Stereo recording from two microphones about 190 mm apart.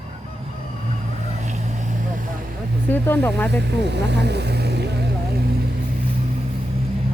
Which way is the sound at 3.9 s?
65° right (ahead or behind).